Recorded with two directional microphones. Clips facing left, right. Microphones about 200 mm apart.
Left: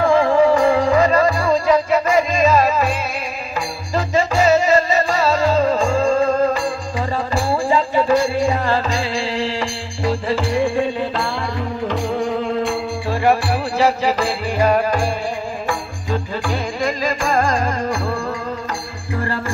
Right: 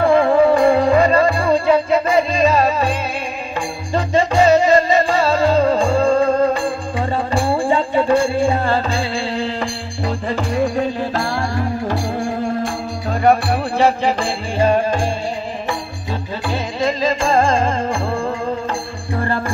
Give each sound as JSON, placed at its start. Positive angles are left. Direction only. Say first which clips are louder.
{"t": 0.0, "sound": "music", "louder": "right 1 dB", "side_deg": -35}
{"t": 11.5, "sound": "music", "louder": "right 2 dB", "side_deg": -45}
{"t": 13.7, "sound": "music", "louder": "right 1 dB", "side_deg": -30}
{"t": 16.1, "sound": "music", "louder": "left 2 dB", "side_deg": -20}